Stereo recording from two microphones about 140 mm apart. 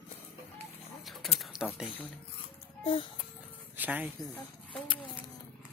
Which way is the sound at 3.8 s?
10° right (ahead or behind).